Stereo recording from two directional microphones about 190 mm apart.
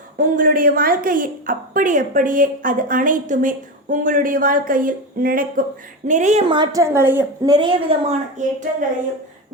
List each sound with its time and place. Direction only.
0.3 s a woman's voice: 45° right (ahead or behind)
6.5 s a woman's voice: 20° right (ahead or behind)